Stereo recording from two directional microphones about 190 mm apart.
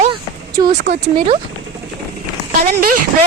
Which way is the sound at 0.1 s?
25° right (ahead or behind).